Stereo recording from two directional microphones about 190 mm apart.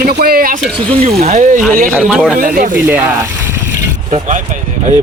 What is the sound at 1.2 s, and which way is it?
Speech, 40° right (ahead or behind).